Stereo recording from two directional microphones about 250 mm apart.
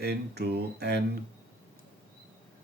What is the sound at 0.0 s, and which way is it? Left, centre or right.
Speech, right.